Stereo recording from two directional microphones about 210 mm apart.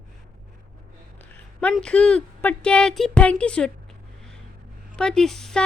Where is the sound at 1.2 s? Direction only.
5° left (ahead or behind).